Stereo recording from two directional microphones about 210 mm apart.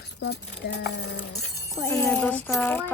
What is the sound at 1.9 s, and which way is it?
Speech, 5° left (ahead or behind).